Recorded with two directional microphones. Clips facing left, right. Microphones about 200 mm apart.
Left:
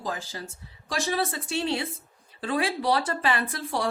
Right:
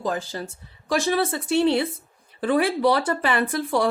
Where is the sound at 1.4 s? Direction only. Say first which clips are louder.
Right 8 dB; 60° right (ahead or behind).